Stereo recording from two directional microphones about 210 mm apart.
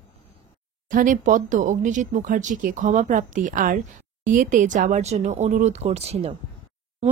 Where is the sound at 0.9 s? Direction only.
40° right (ahead or behind).